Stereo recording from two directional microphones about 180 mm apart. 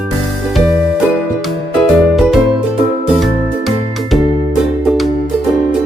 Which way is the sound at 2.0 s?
Centre (ahead or behind).